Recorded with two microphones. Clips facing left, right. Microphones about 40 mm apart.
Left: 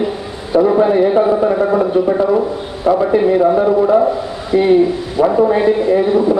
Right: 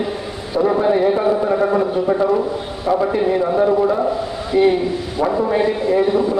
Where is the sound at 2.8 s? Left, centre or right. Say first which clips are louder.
Left 5 dB; centre.